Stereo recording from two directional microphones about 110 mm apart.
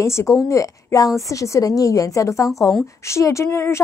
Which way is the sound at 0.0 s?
25° left (ahead or behind).